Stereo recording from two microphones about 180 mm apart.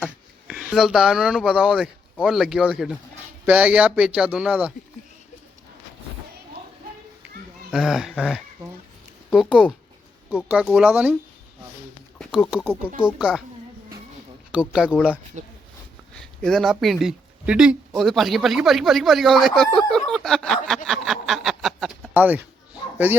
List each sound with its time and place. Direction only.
0.0 s speech: 5° right (ahead or behind)
7.7 s speech: 5° right (ahead or behind)
10.3 s speech: 5° right (ahead or behind)
12.2 s speech: centre (ahead or behind)
14.5 s speech: 5° right (ahead or behind)
15.4 s speech: 40° right (ahead or behind)
16.1 s a sound: 5° left (ahead or behind)
23.0 s speech: 10° right (ahead or behind)